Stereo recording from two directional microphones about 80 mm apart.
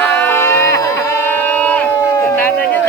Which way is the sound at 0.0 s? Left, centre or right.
Left.